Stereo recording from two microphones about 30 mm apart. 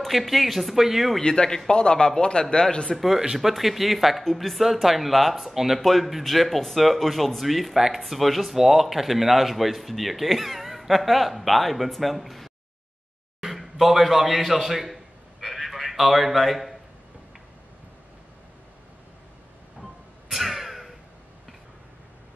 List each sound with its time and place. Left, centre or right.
0.1 s a man's voice: centre
1.2 s a man's voice: left
3.3 s a man's voice: centre
5.8 s a man's voice: centre
15.4 s a sound: centre
19.8 s music: centre